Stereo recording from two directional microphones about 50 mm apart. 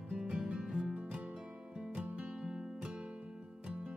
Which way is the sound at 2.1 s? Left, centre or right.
Right.